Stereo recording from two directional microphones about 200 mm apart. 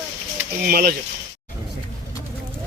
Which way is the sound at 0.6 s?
45° right (ahead or behind).